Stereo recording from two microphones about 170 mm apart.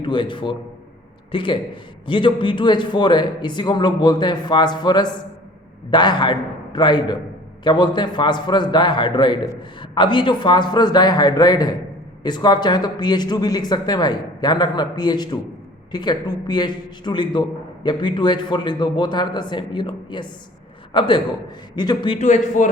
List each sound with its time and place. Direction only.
0.0 s speech: 30° left (ahead or behind)
22.2 s speech: 45° left (ahead or behind)